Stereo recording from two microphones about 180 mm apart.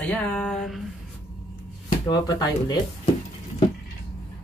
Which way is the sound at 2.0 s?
20° left (ahead or behind).